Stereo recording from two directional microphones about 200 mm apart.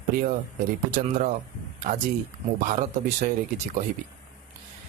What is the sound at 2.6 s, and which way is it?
Speech, 40° right (ahead or behind).